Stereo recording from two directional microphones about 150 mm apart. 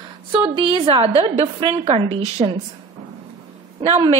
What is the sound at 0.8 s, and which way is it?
A woman's voice, 40° right (ahead or behind).